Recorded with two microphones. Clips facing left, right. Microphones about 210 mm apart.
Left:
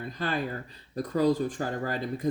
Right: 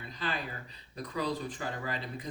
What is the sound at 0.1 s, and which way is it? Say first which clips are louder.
Speech: left 6 dB; 50° left (ahead or behind).